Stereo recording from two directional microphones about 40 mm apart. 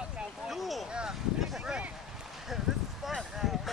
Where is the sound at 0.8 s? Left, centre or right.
Right.